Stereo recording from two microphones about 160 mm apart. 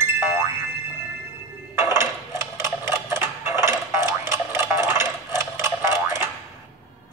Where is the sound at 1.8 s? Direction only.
15° right (ahead or behind).